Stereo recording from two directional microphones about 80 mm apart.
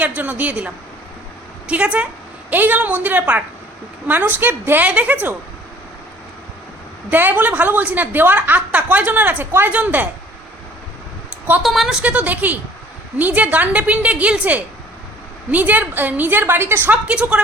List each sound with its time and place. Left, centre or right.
0.0 s speech: right
7.1 s speech: right
11.6 s speech: centre
12.0 s speech: centre